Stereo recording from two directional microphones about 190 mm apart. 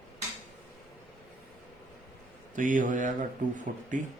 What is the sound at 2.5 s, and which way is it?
A man's voice, 45° right (ahead or behind).